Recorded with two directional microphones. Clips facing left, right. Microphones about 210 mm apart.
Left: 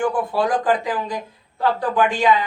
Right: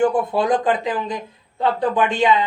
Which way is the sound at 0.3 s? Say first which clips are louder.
Right 1 dB; 20° right (ahead or behind).